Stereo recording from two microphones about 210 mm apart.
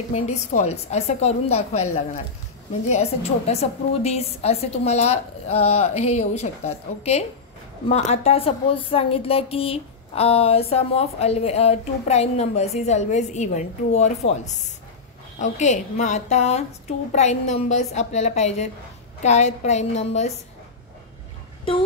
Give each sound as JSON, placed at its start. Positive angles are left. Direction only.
{"t": 0.1, "sound": "a woman's voice", "side_deg": 35}
{"t": 2.9, "sound": "a woman's voice", "side_deg": 30}